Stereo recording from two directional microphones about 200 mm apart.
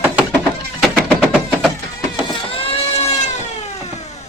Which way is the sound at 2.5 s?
30° left (ahead or behind).